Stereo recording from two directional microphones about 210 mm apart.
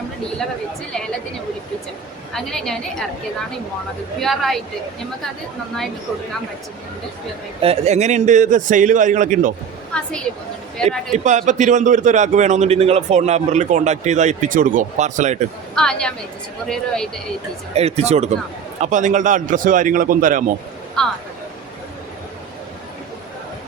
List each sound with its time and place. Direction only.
2.3 s a woman's voice: centre (ahead or behind)
4.2 s a woman's voice: centre (ahead or behind)
7.6 s a man's voice: 30° right (ahead or behind)
9.9 s a woman's voice: 5° left (ahead or behind)
11.1 s a man's voice: 35° right (ahead or behind)
15.7 s a woman's voice: 5° left (ahead or behind)
17.7 s a man's voice: 30° right (ahead or behind)
21.0 s a woman's voice: 5° left (ahead or behind)